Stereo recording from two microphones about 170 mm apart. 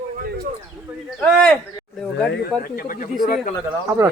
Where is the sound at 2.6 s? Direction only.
55° left (ahead or behind).